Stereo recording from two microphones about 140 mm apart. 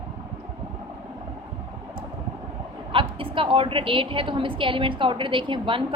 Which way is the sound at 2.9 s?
40° right (ahead or behind).